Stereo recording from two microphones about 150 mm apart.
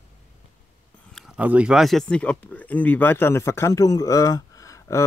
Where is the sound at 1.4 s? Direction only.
10° right (ahead or behind).